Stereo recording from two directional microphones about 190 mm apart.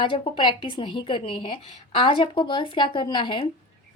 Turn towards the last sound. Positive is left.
turn(degrees=25)  # may be behind; listen again after turning